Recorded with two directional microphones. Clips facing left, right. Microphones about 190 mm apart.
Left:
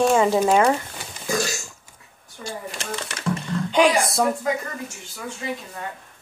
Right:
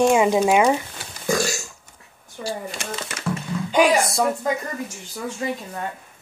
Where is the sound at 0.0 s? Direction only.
10° right (ahead or behind).